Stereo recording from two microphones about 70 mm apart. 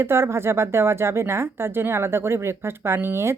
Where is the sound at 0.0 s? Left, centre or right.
Right.